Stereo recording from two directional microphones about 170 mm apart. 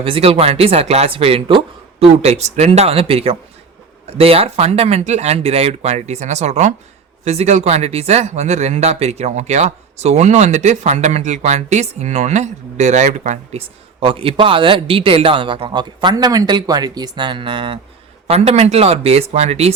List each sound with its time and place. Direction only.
0.0 s speech: 35° right (ahead or behind)